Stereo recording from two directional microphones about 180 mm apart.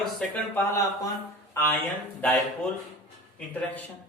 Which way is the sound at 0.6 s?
15° left (ahead or behind).